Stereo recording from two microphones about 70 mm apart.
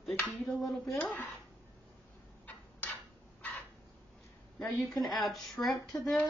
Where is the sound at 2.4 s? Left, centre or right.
Left.